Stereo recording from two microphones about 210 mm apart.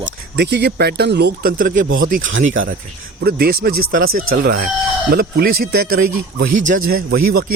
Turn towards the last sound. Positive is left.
turn(degrees=-45)  # may be behind; listen again after turning